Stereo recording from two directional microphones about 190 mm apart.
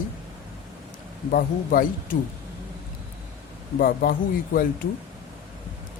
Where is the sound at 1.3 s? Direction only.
50° left (ahead or behind).